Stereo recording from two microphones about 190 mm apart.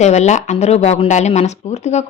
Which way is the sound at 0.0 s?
35° left (ahead or behind).